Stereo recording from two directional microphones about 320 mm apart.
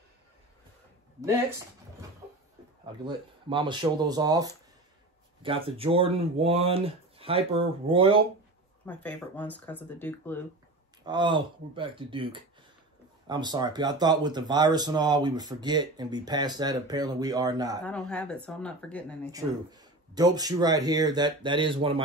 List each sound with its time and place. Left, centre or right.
3.4 s speech: centre
8.8 s speech: centre
11.1 s speech: centre
17.8 s speech: centre
19.3 s speech: centre